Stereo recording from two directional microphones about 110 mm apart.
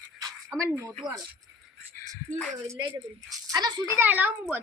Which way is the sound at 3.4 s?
35° right (ahead or behind).